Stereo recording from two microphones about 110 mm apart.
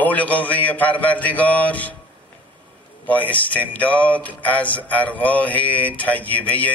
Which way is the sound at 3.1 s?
15° left (ahead or behind).